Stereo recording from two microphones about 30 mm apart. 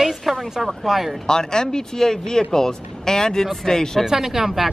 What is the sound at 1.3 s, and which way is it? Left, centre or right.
Speech, left.